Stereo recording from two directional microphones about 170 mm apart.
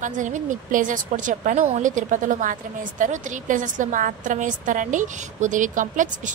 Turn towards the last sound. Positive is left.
turn(degrees=-50)  # may be behind; listen again after turning